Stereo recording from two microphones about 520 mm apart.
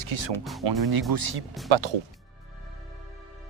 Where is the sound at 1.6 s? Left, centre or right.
Right.